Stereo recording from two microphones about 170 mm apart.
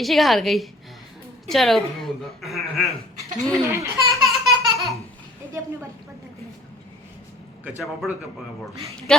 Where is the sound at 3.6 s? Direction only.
15° right (ahead or behind).